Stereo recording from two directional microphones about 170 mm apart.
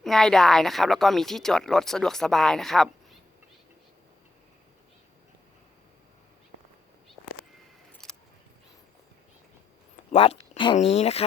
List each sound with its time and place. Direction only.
0.0 s speech: centre (ahead or behind)
8.0 s keys jangling: centre (ahead or behind)
10.1 s a sound: 40° left (ahead or behind)
10.8 s speech: 40° left (ahead or behind)